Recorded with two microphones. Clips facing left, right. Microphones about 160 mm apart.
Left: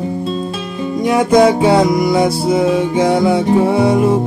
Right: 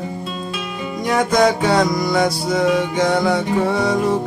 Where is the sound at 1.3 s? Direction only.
30° left (ahead or behind).